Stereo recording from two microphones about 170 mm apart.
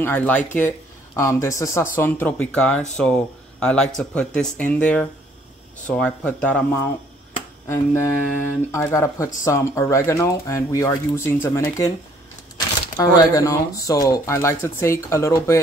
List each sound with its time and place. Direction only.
0.0 s speech: 10° left (ahead or behind)
12.9 s speech: 20° left (ahead or behind)